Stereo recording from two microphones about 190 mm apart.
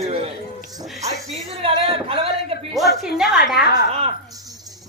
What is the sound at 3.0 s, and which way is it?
Speech, centre (ahead or behind).